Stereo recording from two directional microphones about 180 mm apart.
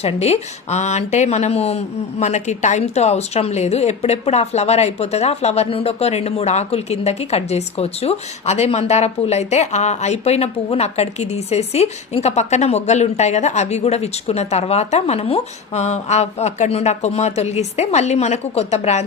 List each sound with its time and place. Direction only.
0.0 s speech: 35° left (ahead or behind)